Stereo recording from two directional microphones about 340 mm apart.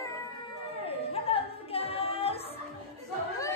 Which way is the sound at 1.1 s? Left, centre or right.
Centre.